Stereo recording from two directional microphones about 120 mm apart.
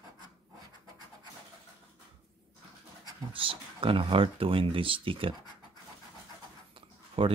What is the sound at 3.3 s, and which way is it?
Speech, 45° right (ahead or behind).